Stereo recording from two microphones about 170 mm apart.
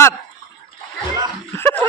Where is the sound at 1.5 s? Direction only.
15° left (ahead or behind).